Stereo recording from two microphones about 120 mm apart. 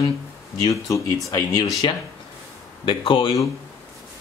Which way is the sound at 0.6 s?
30° left (ahead or behind).